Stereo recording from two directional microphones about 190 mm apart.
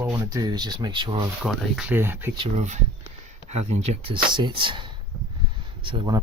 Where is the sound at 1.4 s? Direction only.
Centre (ahead or behind).